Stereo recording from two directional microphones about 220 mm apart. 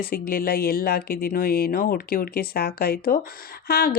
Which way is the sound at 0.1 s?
40° left (ahead or behind).